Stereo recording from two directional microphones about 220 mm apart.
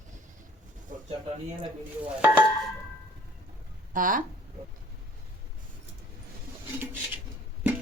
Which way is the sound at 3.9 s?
40° right (ahead or behind).